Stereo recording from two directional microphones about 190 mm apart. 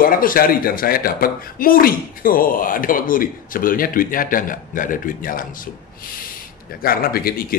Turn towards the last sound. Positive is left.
turn(degrees=50)  # may be behind; listen again after turning